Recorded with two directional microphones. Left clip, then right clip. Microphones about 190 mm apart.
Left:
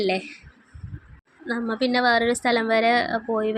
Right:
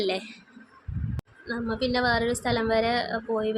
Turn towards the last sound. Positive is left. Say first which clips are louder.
# left 3 dB
turn(degrees=20)  # may be behind; listen again after turning